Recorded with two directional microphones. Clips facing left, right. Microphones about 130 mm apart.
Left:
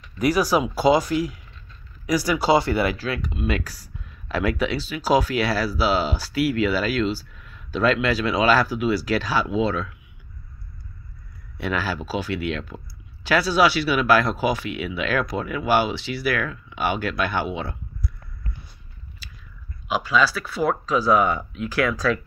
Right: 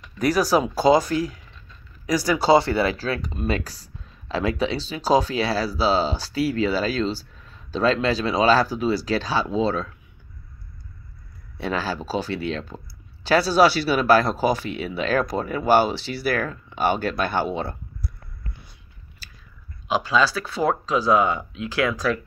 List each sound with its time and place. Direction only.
0.2 s speech: 35° right (ahead or behind)
1.0 s speech: 25° left (ahead or behind)
2.0 s speech: 30° right (ahead or behind)
11.5 s speech: 30° right (ahead or behind)
19.9 s speech: 25° right (ahead or behind)